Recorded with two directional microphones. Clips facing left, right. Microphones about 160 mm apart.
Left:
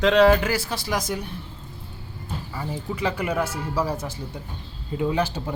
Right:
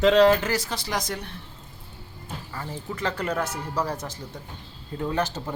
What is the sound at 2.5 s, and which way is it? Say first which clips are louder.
Speech: left 3 dB; 10° left (ahead or behind).